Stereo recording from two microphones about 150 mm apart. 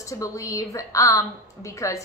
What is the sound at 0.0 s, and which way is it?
A woman's voice, 20° left (ahead or behind).